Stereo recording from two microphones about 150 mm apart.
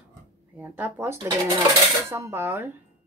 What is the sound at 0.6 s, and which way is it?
Speech, 15° right (ahead or behind).